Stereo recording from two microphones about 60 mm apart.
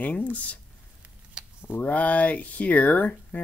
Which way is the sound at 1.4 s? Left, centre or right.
Centre.